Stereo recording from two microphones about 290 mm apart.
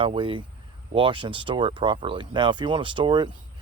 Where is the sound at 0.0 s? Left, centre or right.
Centre.